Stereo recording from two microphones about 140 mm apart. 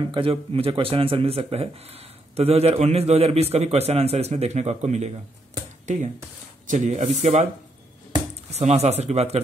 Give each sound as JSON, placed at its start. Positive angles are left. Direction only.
{"t": 0.1, "sound": "a man's voice", "side_deg": -40}
{"t": 6.7, "sound": "speech", "side_deg": -55}
{"t": 8.5, "sound": "a man's voice", "side_deg": -50}